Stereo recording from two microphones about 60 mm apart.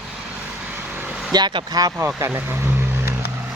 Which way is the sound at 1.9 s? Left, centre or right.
Right.